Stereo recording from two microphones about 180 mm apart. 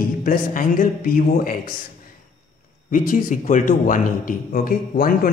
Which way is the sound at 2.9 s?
50° left (ahead or behind).